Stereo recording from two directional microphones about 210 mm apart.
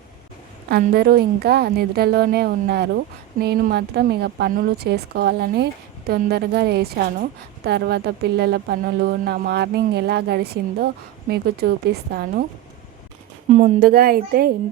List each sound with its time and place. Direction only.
0.7 s a woman's voice: 50° right (ahead or behind)
13.5 s a woman's voice: 35° right (ahead or behind)